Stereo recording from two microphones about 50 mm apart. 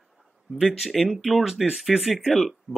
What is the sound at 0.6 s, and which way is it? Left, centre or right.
Speech, centre.